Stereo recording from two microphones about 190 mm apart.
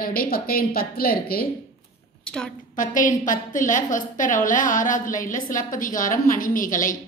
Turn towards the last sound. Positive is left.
turn(degrees=45)  # may be behind; listen again after turning